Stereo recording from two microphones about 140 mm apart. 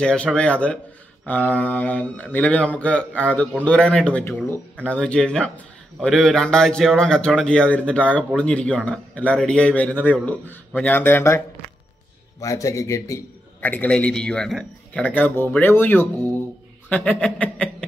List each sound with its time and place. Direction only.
0.0 s a man's voice: 5° left (ahead or behind)